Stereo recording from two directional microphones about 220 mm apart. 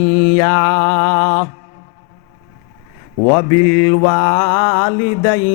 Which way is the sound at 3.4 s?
15° left (ahead or behind).